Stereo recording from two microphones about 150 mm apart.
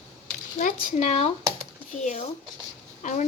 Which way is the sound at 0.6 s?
60° left (ahead or behind).